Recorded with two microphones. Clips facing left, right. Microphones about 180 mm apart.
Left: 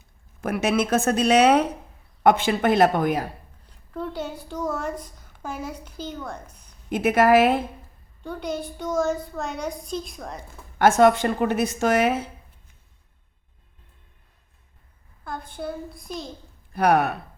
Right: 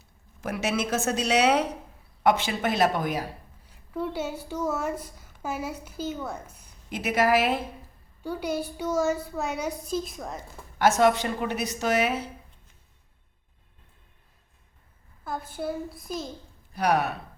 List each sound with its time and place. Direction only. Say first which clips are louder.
0.4 s a woman's voice: left 5 dB; 55° left (ahead or behind)
3.7 s a woman's voice: right 1 dB; 5° right (ahead or behind)
6.9 s a woman's voice: left 6 dB; 50° left (ahead or behind)
8.2 s a woman's voice: even; 10° right (ahead or behind)
10.8 s a woman's voice: left 4 dB; 55° left (ahead or behind)
15.2 s a child's voice: even; 5° right (ahead or behind)
16.7 s a woman's voice: left 5 dB; 55° left (ahead or behind)